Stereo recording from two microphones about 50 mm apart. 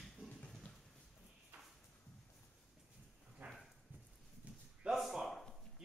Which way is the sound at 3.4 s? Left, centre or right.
Right.